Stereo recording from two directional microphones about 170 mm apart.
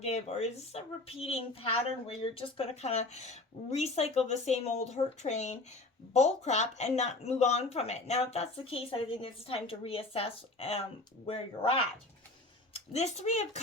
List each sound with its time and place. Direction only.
0.0 s speech: 40° left (ahead or behind)